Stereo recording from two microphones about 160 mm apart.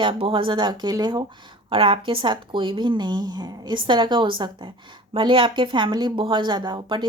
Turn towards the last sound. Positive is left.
turn(degrees=-30)  # may be behind; listen again after turning